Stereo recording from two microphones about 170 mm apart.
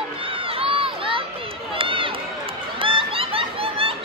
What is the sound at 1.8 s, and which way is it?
Run, 30° right (ahead or behind).